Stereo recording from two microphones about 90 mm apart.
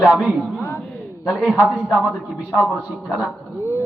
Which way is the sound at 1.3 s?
10° left (ahead or behind).